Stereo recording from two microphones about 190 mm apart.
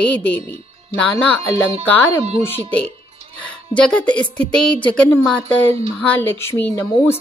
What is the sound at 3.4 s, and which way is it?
A woman's voice, 5° left (ahead or behind).